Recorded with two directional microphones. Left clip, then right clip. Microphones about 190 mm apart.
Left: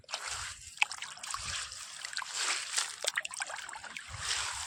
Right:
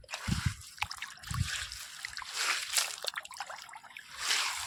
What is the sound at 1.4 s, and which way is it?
Splash, 20° right (ahead or behind).